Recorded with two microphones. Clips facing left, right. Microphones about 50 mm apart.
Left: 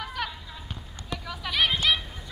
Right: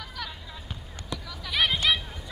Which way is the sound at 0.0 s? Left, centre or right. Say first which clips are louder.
Left 5 dB; left.